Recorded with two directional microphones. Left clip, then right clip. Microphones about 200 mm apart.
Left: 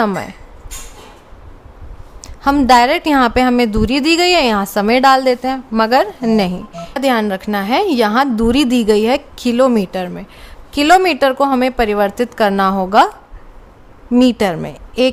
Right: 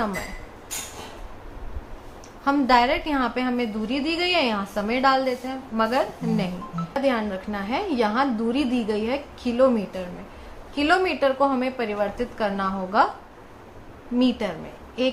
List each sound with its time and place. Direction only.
2.2 s a woman's voice: 55° left (ahead or behind)
14.2 s a woman's voice: 55° left (ahead or behind)